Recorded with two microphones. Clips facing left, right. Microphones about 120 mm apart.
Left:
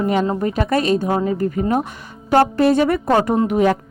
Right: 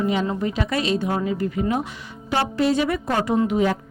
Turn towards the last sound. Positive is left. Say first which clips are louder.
# left 4 dB
turn(degrees=60)  # may be behind; listen again after turning